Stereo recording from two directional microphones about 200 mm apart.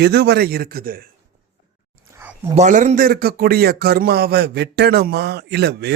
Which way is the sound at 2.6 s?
35° right (ahead or behind).